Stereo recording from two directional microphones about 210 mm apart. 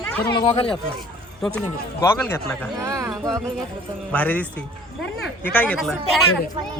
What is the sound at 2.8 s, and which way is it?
Speech, 15° right (ahead or behind).